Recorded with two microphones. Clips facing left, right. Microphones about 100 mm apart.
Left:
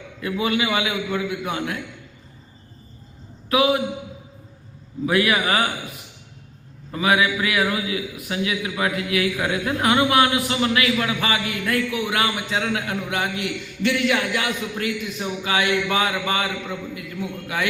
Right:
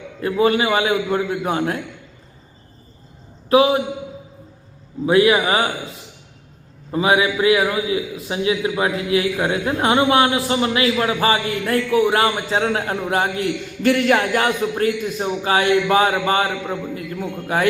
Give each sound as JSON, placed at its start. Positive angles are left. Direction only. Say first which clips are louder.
{"t": 0.2, "sound": "a man's voice", "louder": "right 6 dB", "side_deg": -40}
{"t": 3.5, "sound": "a man's voice", "louder": "right 4 dB", "side_deg": -30}
{"t": 5.0, "sound": "a man's voice", "louder": "right 5 dB", "side_deg": -25}
{"t": 6.9, "sound": "a man's voice", "louder": "right 3 dB", "side_deg": -25}